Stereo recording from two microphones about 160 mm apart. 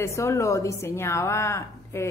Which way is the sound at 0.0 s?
20° left (ahead or behind).